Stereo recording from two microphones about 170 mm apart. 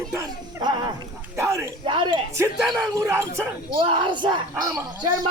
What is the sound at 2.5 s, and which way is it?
Speech, centre (ahead or behind).